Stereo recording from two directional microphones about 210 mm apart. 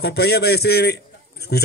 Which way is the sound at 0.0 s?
50° left (ahead or behind).